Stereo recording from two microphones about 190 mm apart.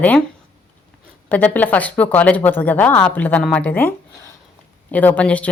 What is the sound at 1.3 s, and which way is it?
Speech, 10° left (ahead or behind).